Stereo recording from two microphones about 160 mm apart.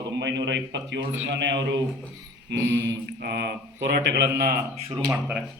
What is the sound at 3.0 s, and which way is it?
A man's voice, 90° right.